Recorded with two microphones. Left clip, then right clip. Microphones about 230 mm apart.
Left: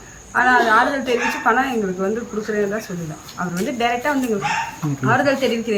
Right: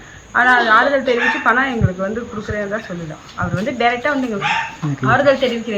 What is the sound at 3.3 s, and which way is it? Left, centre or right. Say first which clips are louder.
Speech: right 3 dB; centre.